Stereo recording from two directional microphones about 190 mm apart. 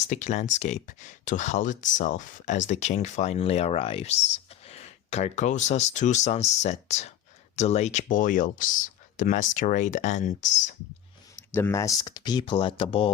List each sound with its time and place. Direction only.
0.1 s speech: 40° left (ahead or behind)
11.5 s speech: 15° left (ahead or behind)